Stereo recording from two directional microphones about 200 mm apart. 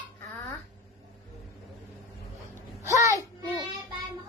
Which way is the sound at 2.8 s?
15° right (ahead or behind).